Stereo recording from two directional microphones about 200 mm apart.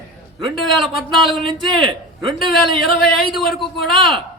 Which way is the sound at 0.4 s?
Centre (ahead or behind).